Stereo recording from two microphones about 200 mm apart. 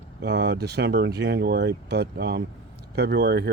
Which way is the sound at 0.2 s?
60° right (ahead or behind).